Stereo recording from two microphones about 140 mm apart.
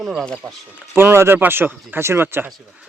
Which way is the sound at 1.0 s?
15° right (ahead or behind).